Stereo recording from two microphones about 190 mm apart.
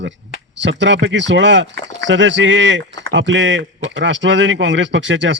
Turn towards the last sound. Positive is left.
turn(degrees=-75)  # may be behind; listen again after turning